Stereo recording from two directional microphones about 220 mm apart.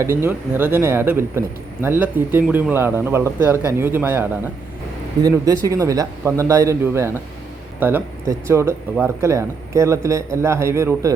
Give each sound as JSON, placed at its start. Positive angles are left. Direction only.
{"t": 0.0, "sound": "speech", "side_deg": -10}